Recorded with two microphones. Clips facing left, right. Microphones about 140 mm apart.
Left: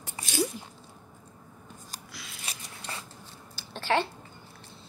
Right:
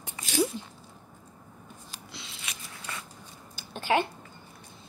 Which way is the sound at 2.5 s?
30° left (ahead or behind).